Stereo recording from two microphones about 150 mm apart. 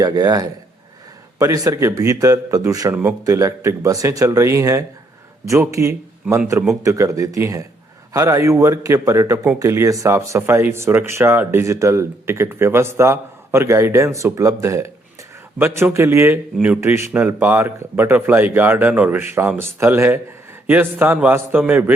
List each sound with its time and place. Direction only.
0.0 s a man's voice: 25° right (ahead or behind)
2.9 s speech: 5° right (ahead or behind)
3.2 s a man's voice: 20° right (ahead or behind)